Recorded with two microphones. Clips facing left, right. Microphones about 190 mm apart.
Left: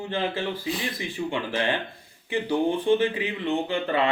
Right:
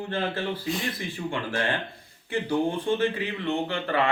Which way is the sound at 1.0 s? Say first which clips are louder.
Left 2 dB; 15° left (ahead or behind).